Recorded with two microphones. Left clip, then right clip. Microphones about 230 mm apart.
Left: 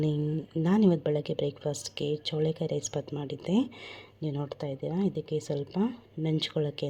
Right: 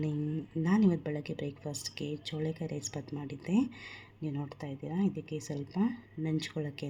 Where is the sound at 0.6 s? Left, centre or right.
Left.